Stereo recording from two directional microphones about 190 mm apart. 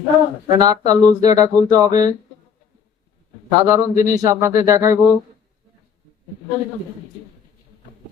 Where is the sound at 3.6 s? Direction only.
15° right (ahead or behind).